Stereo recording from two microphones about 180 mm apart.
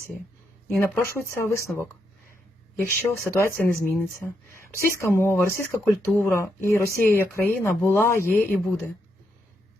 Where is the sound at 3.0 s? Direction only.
15° left (ahead or behind).